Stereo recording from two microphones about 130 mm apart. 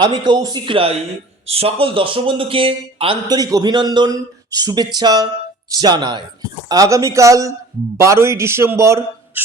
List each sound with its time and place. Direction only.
0.0 s a man's voice: 35° right (ahead or behind)
3.3 s a man's voice: 30° right (ahead or behind)
6.7 s a man's voice: 25° right (ahead or behind)